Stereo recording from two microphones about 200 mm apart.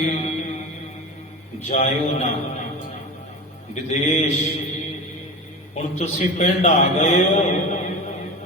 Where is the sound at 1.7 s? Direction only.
40° left (ahead or behind).